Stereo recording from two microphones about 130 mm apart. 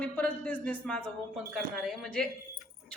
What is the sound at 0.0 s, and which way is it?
A man's voice, 10° left (ahead or behind).